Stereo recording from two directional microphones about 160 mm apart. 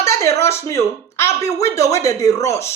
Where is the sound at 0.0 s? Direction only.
15° left (ahead or behind).